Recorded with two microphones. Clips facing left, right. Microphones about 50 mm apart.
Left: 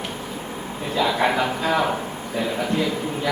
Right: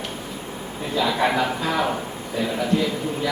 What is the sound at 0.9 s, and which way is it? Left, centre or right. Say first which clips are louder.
Speech: even; centre.